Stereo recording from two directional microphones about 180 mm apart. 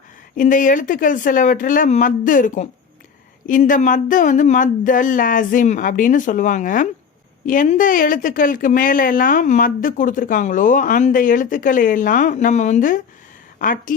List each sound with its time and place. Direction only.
0.3 s a woman's voice: 45° left (ahead or behind)